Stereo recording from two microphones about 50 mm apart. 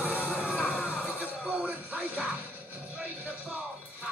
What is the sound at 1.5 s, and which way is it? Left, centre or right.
Music, right.